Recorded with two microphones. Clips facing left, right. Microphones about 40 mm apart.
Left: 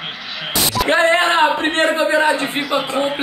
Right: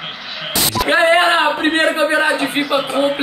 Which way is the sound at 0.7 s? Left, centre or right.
Centre.